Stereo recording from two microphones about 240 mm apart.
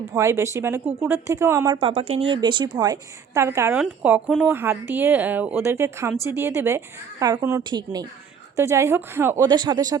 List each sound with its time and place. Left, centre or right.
0.1 s a woman's voice: centre